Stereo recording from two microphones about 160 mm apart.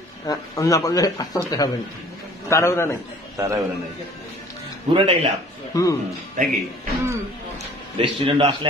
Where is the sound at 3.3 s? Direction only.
20° right (ahead or behind).